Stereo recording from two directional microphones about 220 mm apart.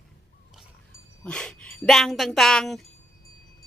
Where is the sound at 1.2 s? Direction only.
5° left (ahead or behind).